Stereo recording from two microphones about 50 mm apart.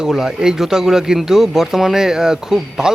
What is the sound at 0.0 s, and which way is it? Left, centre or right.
Speech, centre.